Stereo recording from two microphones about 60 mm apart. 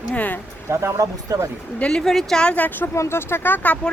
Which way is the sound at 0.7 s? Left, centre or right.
Right.